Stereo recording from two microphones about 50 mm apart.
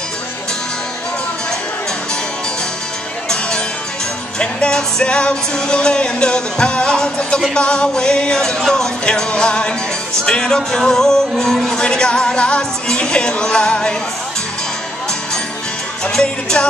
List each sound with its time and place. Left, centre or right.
3.3 s music: centre
16.1 s music: centre